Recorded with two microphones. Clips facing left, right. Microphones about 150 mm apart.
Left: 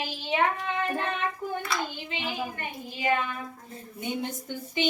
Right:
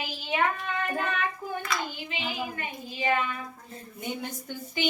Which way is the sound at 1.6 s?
30° left (ahead or behind).